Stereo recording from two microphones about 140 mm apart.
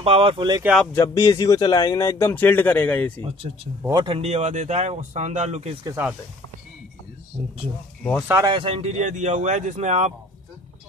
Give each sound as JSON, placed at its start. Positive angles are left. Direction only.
{"t": 0.0, "sound": "speech", "side_deg": -40}
{"t": 0.9, "sound": "speech", "side_deg": 20}
{"t": 3.9, "sound": "speech", "side_deg": -40}
{"t": 8.2, "sound": "speech", "side_deg": -15}
{"t": 8.5, "sound": "speech", "side_deg": -40}